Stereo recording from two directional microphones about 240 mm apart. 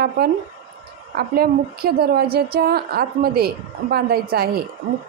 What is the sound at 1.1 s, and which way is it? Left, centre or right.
A woman's voice, right.